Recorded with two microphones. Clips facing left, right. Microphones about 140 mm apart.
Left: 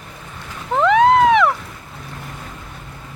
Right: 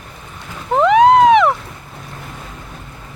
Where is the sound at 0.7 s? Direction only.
15° right (ahead or behind).